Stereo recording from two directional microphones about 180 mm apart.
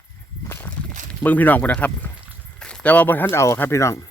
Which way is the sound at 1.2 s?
10° left (ahead or behind).